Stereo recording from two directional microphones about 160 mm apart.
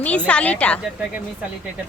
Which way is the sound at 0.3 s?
5° left (ahead or behind).